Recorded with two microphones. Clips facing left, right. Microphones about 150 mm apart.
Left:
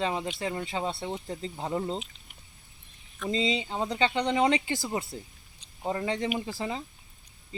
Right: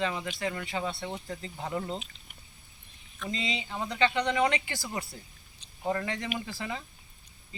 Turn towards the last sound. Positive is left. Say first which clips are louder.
# left 4 dB
turn(degrees=25)  # may be behind; listen again after turning